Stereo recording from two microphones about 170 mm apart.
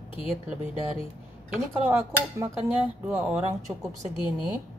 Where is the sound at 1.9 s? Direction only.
15° right (ahead or behind).